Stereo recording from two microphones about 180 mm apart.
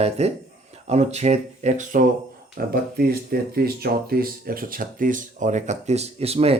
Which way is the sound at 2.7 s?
55° right (ahead or behind).